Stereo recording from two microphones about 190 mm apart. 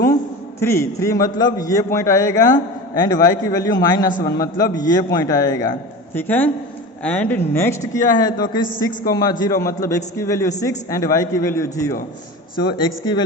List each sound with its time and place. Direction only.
0.6 s a man's voice: 15° left (ahead or behind)